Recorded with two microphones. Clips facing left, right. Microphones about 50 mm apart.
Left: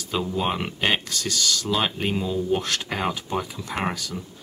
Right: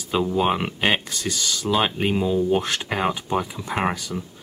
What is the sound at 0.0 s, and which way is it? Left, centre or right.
Speech, centre.